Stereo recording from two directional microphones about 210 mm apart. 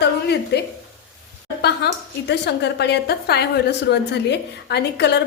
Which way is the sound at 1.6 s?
55° left (ahead or behind).